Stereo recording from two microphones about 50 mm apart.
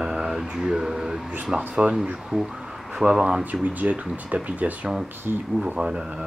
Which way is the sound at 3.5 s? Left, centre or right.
Right.